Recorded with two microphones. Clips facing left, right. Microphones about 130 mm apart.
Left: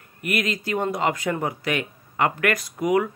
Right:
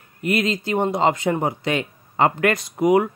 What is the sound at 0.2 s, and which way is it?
Speech, 25° right (ahead or behind).